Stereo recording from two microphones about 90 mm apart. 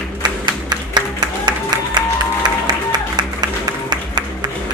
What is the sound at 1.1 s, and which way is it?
Music, 55° right (ahead or behind).